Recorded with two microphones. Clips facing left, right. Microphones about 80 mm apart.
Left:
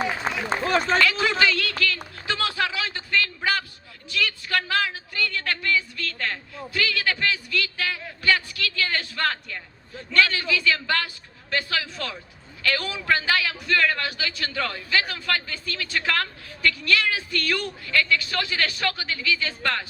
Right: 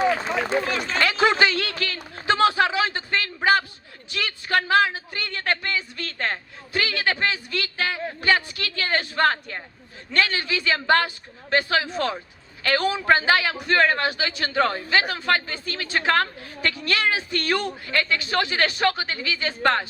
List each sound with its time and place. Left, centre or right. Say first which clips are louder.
0.3 s run: right 2 dB; left
0.7 s speech: left 5 dB; left
0.9 s speech: right 2 dB; right
1.8 s a sound: left 3 dB; right
10.1 s a man's voice: left 2 dB; right